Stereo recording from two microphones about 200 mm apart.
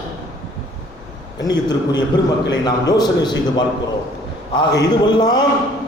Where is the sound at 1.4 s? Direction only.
20° left (ahead or behind).